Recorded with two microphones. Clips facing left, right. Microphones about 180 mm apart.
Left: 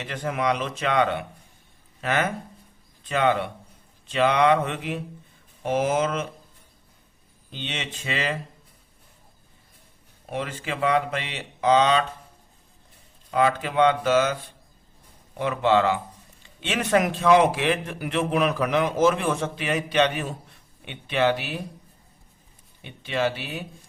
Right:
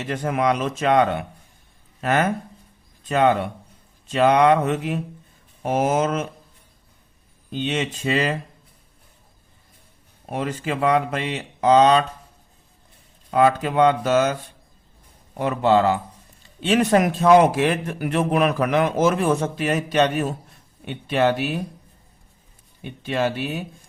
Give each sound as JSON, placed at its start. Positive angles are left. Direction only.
{"t": 0.0, "sound": "a man's voice", "side_deg": -45}
{"t": 7.5, "sound": "a man's voice", "side_deg": -45}
{"t": 10.2, "sound": "a man's voice", "side_deg": -45}
{"t": 13.3, "sound": "a man's voice", "side_deg": -45}
{"t": 15.4, "sound": "a man's voice", "side_deg": -40}
{"t": 22.8, "sound": "a man's voice", "side_deg": -45}